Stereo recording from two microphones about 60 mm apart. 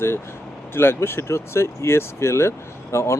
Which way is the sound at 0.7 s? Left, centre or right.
Left.